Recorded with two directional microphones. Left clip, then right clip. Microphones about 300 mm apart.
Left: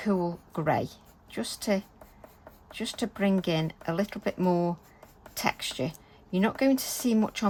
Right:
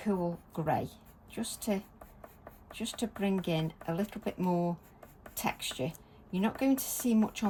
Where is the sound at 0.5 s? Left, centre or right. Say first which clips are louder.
Left 6 dB; left.